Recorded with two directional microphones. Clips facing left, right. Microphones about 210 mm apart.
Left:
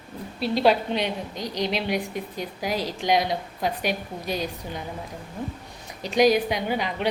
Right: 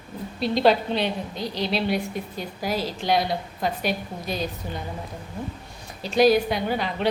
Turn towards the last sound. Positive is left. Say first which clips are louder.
# right 1 dB
turn(degrees=10)  # may be behind; listen again after turning